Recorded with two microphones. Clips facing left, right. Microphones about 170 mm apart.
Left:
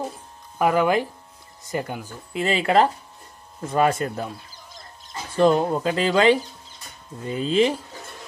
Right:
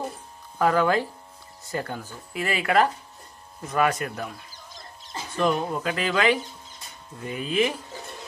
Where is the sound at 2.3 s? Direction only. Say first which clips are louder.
Left 3 dB; 25° left (ahead or behind).